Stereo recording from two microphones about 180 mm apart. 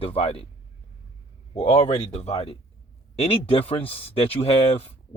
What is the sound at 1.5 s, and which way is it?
Speech, 35° left (ahead or behind).